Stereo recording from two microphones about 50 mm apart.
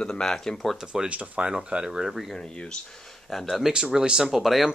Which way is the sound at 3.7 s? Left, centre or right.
Centre.